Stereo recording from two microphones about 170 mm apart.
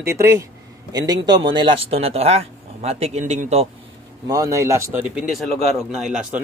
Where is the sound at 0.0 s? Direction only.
15° right (ahead or behind); by 3.6 s 40° right (ahead or behind).